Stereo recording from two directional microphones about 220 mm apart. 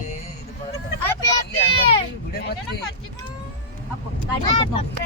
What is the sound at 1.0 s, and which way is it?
Vehicle, 15° left (ahead or behind).